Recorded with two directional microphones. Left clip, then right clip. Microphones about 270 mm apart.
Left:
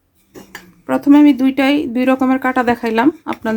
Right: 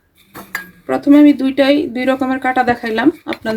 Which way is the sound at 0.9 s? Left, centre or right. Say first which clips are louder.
Right 1 dB; left.